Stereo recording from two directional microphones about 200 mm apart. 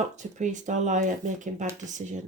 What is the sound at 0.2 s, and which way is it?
Speech, 35° right (ahead or behind).